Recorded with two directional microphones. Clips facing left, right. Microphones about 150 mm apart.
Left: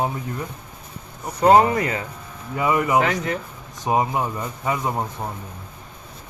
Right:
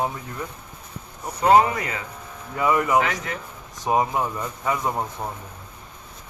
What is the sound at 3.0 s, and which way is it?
Speech, 35° left (ahead or behind).